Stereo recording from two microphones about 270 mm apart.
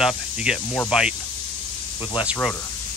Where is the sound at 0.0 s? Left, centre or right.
Centre.